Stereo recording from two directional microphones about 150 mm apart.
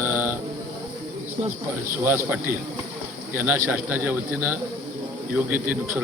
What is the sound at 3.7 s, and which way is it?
Speech, 10° right (ahead or behind).